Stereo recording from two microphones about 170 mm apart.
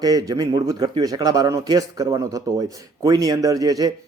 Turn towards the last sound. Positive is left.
turn(degrees=-20)  # may be behind; listen again after turning